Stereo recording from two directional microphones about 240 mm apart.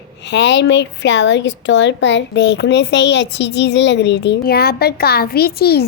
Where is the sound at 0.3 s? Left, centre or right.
Left.